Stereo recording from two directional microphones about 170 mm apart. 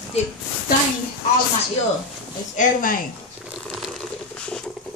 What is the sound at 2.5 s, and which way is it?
Speech, 50° left (ahead or behind).